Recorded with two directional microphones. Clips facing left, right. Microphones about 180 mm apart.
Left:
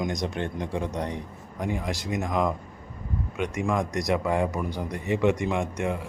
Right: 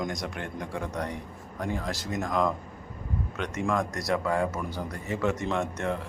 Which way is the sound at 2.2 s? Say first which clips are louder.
Even; 5° left (ahead or behind).